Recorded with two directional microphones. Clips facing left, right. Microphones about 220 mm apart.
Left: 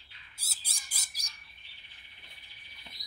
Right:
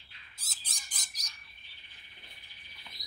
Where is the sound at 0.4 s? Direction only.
10° left (ahead or behind).